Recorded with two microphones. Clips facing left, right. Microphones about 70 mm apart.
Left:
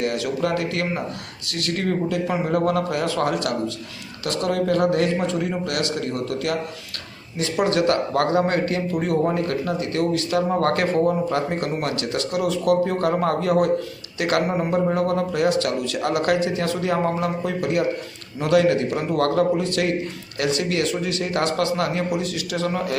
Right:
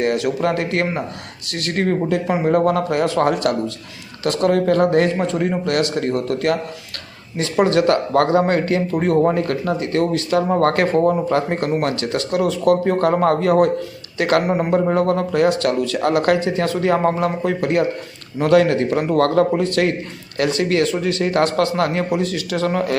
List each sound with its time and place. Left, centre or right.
0.0 s a man's voice: right